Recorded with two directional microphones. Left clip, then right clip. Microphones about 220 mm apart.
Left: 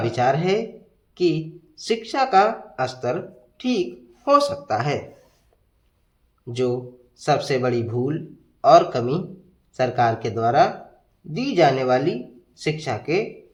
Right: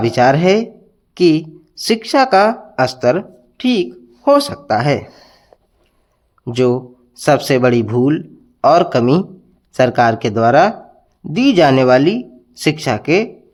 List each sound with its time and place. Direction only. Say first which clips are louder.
0.0 s a woman's voice: right 9 dB; 40° right (ahead or behind)
6.4 s speech: right 9 dB; 40° right (ahead or behind)